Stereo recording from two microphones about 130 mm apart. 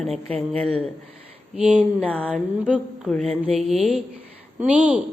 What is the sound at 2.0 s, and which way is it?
Speech, 10° left (ahead or behind).